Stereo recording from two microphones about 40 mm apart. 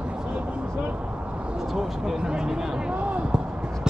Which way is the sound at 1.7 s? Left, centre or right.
Centre.